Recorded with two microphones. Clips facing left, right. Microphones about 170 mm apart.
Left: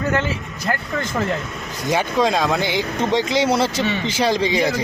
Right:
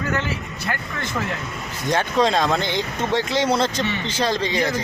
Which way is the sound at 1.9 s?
5° left (ahead or behind).